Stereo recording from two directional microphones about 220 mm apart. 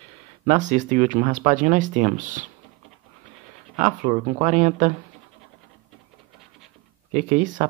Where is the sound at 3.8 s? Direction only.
35° right (ahead or behind).